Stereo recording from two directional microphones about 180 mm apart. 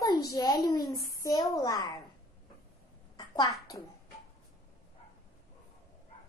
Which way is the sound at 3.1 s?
25° left (ahead or behind).